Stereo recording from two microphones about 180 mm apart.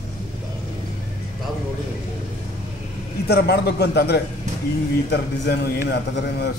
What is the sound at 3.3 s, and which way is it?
A man's voice, 65° left (ahead or behind).